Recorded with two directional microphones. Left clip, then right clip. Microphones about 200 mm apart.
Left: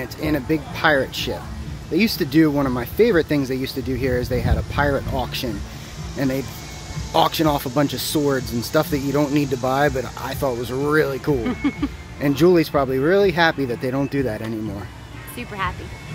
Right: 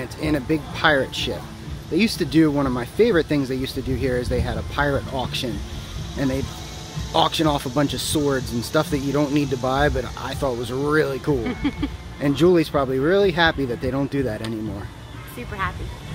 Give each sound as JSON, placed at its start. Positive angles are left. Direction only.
{"t": 0.0, "sound": "speech", "side_deg": 5}
{"t": 11.4, "sound": "speech", "side_deg": 50}
{"t": 12.2, "sound": "speech", "side_deg": 5}